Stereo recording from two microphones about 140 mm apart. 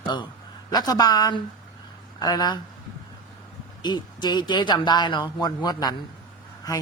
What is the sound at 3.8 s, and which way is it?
A woman's voice, 30° left (ahead or behind).